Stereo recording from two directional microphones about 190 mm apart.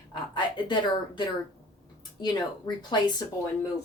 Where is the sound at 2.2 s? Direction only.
20° left (ahead or behind).